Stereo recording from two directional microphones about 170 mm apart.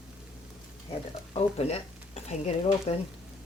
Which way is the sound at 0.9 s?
35° left (ahead or behind).